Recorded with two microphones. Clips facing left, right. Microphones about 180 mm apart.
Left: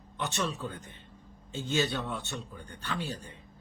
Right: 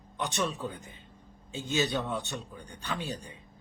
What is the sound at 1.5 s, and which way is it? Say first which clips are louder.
Speech: right 1 dB; 15° right (ahead or behind).